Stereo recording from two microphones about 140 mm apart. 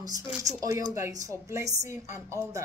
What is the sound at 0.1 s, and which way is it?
Speech, 25° right (ahead or behind).